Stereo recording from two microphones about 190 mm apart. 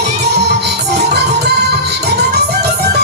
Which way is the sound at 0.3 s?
60° right (ahead or behind).